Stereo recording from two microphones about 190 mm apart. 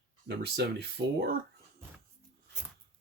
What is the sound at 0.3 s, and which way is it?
Speech, 60° right (ahead or behind).